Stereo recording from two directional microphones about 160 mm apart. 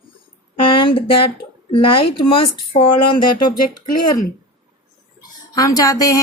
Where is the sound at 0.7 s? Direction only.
35° left (ahead or behind).